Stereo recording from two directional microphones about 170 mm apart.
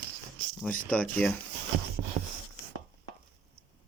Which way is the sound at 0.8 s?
5° left (ahead or behind).